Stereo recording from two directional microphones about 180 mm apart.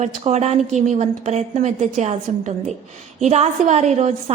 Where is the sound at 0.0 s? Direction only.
40° right (ahead or behind).